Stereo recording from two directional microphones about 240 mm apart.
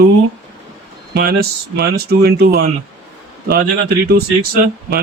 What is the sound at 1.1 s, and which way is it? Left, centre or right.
Speech, right.